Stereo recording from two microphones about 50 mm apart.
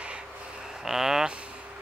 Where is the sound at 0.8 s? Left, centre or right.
Centre.